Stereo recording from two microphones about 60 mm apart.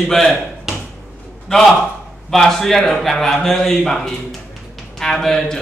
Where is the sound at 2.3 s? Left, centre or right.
Centre.